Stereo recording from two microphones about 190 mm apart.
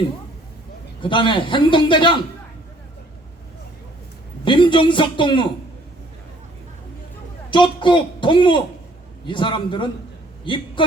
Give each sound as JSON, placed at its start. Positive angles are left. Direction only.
{"t": 1.0, "sound": "a man's voice", "side_deg": 25}
{"t": 4.4, "sound": "a man's voice", "side_deg": 25}
{"t": 7.5, "sound": "a man's voice", "side_deg": 25}